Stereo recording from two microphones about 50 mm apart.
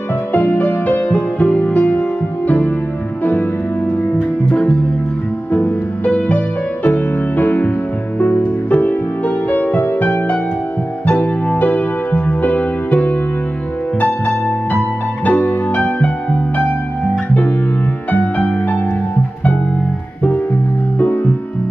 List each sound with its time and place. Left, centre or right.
0.3 s music: left
4.1 s music: left
18.1 s music: left
21.0 s music: left